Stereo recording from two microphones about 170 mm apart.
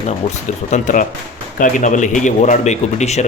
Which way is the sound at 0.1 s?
45° left (ahead or behind).